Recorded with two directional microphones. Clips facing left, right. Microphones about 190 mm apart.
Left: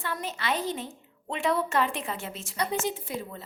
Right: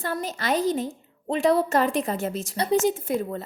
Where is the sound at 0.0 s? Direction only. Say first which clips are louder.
Right 4 dB; 40° right (ahead or behind).